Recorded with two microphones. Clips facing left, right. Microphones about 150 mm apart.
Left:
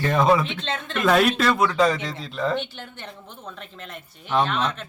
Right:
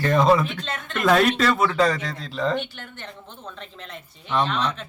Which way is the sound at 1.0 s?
Centre (ahead or behind).